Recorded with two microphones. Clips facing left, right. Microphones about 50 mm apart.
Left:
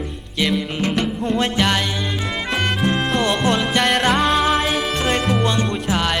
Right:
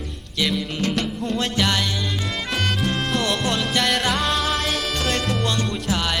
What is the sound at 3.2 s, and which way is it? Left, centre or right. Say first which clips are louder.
Music: left 5 dB; centre.